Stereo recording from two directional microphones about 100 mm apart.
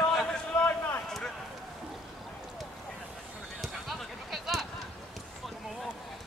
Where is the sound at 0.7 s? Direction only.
20° left (ahead or behind).